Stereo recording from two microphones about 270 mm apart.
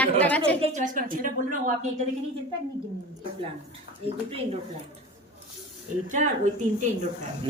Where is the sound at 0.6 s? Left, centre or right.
Right.